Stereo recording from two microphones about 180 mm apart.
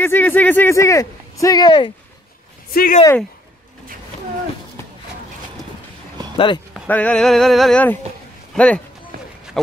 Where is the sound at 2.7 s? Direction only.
50° left (ahead or behind).